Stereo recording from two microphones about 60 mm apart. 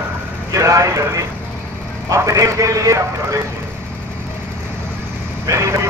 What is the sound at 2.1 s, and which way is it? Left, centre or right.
A man's voice, right.